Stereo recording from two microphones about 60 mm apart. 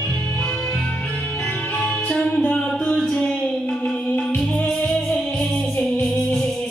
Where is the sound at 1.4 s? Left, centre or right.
Centre.